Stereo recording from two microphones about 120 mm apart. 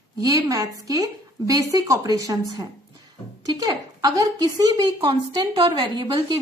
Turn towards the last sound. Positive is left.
turn(degrees=-30)  # may be behind; listen again after turning